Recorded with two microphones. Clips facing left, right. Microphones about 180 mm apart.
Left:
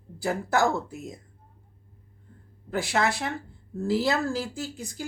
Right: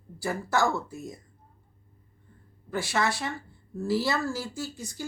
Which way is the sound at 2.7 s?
20° left (ahead or behind).